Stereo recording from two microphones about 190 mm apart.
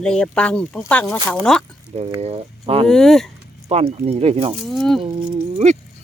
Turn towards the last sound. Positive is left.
turn(degrees=-35)  # may be behind; listen again after turning